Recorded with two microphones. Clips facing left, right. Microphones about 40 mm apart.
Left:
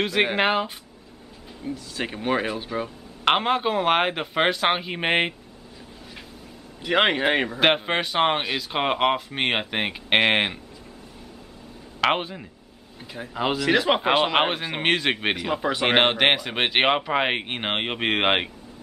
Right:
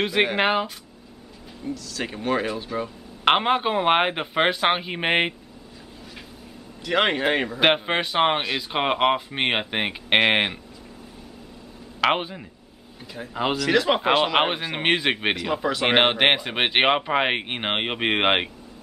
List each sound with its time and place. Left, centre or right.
0.0 s speech: centre
1.6 s speech: left
3.3 s speech: centre
6.8 s speech: centre
12.0 s speech: centre
13.0 s speech: centre
13.3 s speech: centre
13.6 s speech: centre
15.3 s speech: centre